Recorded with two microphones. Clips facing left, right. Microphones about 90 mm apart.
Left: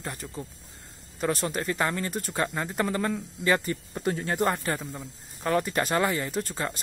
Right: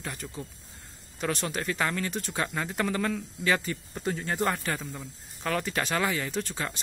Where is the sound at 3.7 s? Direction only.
35° left (ahead or behind).